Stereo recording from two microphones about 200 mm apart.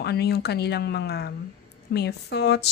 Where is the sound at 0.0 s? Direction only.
55° left (ahead or behind).